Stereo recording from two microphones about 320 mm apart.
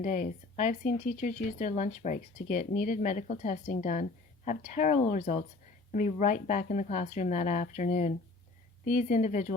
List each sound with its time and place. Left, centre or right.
0.0 s speech: left